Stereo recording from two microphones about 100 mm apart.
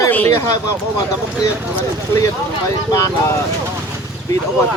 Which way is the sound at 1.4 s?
30° left (ahead or behind).